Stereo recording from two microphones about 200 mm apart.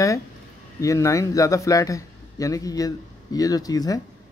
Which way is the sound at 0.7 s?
15° left (ahead or behind).